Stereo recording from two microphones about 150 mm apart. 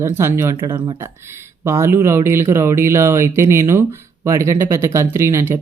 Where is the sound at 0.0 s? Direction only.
15° right (ahead or behind).